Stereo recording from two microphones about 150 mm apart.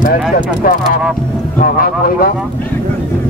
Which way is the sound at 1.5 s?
70° left (ahead or behind).